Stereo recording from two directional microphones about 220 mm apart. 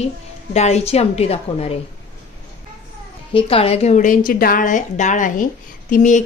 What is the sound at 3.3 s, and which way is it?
Speech, 25° left (ahead or behind).